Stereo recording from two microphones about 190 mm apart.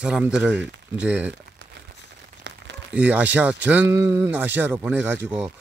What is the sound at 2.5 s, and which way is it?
Crumpling, 70° right (ahead or behind).